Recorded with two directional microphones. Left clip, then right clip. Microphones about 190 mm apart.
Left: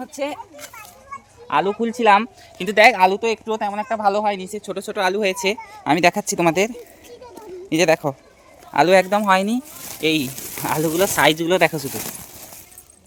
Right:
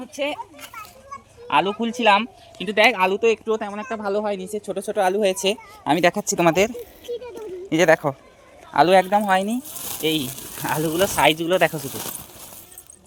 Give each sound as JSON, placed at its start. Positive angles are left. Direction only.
{"t": 0.5, "sound": "a child's voice", "side_deg": -5}
{"t": 1.5, "sound": "speech", "side_deg": 10}
{"t": 2.0, "sound": "speech", "side_deg": 30}
{"t": 2.6, "sound": "speech", "side_deg": 50}
{"t": 3.8, "sound": "speech", "side_deg": 55}
{"t": 4.2, "sound": "speech", "side_deg": 35}
{"t": 4.5, "sound": "speech", "side_deg": 20}
{"t": 6.4, "sound": "speech", "side_deg": 10}